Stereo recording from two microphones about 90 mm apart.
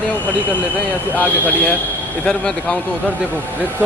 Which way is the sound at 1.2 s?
20° left (ahead or behind).